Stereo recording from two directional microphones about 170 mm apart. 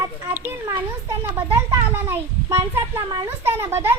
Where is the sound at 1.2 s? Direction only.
10° right (ahead or behind).